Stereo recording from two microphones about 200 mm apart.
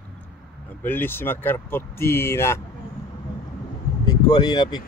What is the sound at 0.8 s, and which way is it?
Speech, 10° left (ahead or behind).